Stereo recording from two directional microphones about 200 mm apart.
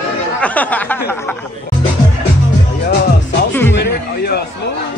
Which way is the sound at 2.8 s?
55° left (ahead or behind).